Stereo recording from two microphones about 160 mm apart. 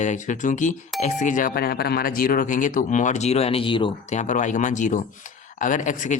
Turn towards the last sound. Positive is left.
turn(degrees=50)  # may be behind; listen again after turning